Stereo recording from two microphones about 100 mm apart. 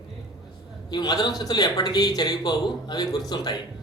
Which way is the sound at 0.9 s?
45° left (ahead or behind).